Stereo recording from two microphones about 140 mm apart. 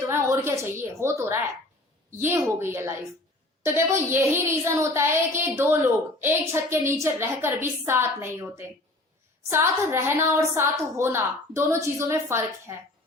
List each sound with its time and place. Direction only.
0.0 s a woman's voice: 20° right (ahead or behind)